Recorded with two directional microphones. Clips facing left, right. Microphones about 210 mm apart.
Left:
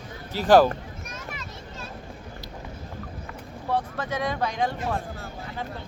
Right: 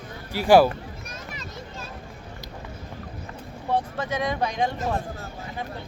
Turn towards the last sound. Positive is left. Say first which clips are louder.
# right 1 dB
turn(degrees=-20)  # may be behind; listen again after turning